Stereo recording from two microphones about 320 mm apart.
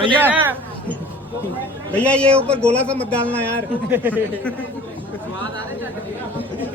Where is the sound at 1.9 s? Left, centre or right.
Centre.